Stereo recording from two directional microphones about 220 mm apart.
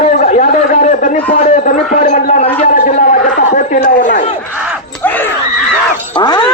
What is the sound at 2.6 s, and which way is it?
Chatter, 35° left (ahead or behind).